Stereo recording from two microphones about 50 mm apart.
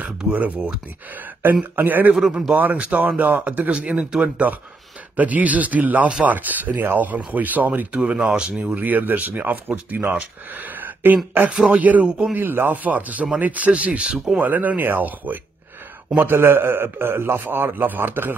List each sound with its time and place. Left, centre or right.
0.3 s speech: right
2.1 s speech: centre
2.5 s speech: right
7.9 s speech: centre
8.5 s speech: right
10.8 s a sound: right
11.5 s speech: right
12.4 s speech: right
14.1 s speech: centre
14.4 s speech: right
16.2 s a man's voice: right